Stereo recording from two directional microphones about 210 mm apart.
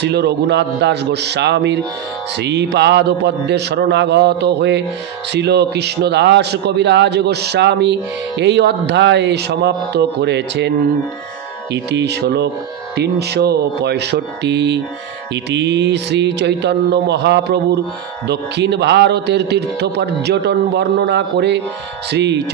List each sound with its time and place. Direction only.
0.0 s music: 55° right (ahead or behind)
8.4 s speech: 55° right (ahead or behind)
11.7 s music: 55° right (ahead or behind)
15.5 s speech: 55° right (ahead or behind)
18.3 s music: 55° right (ahead or behind)
22.1 s speech: 55° right (ahead or behind)